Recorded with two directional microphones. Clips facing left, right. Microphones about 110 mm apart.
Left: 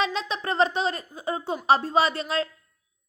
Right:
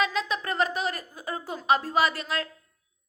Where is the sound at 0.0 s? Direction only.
30° left (ahead or behind).